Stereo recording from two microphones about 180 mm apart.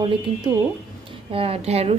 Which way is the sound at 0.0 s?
25° right (ahead or behind).